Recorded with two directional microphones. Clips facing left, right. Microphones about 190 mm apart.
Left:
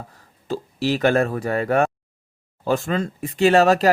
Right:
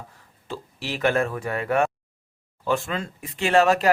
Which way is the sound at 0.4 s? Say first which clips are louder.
Left 10 dB; 40° left (ahead or behind).